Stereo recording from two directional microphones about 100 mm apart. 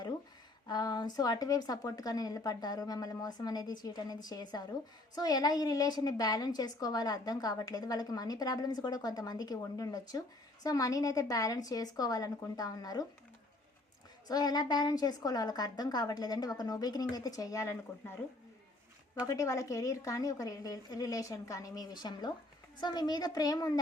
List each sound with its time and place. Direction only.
0.7 s a woman's voice: 40° left (ahead or behind)
14.3 s a woman's voice: 40° left (ahead or behind)
19.2 s a woman's voice: 30° left (ahead or behind)